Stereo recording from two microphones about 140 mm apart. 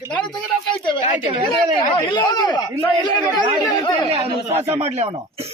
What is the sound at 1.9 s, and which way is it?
Speech, 35° left (ahead or behind).